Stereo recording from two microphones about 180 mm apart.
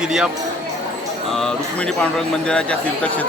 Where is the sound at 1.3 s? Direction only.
Centre (ahead or behind).